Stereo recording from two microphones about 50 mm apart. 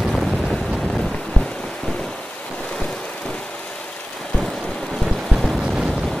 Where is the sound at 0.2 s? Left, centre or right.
Centre.